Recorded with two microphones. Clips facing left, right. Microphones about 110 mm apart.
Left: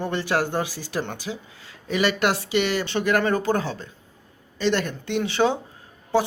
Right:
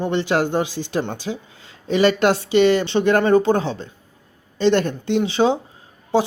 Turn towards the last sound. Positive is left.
turn(degrees=-20)  # may be behind; listen again after turning